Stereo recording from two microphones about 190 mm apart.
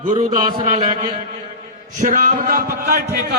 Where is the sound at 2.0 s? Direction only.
40° right (ahead or behind).